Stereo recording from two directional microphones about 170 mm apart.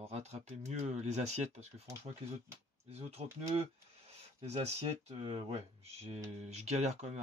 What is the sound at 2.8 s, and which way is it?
Speech, 40° right (ahead or behind).